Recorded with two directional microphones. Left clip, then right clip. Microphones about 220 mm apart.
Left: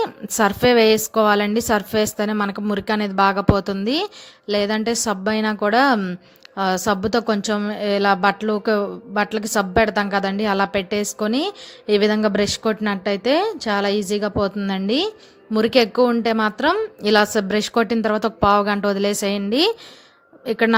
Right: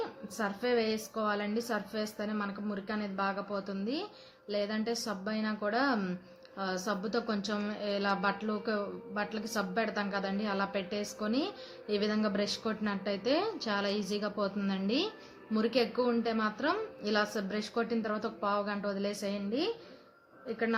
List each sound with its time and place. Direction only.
0.0 s a woman's voice: 45° left (ahead or behind)